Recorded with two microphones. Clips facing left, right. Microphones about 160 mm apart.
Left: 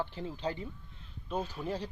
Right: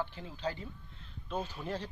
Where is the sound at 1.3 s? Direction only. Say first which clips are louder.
Left 2 dB; 10° left (ahead or behind).